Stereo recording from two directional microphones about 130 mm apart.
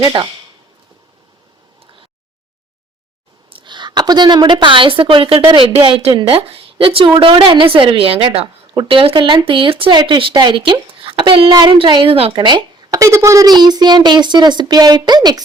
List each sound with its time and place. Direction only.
0.0 s speech: 35° right (ahead or behind)
3.5 s a woman's voice: 35° right (ahead or behind)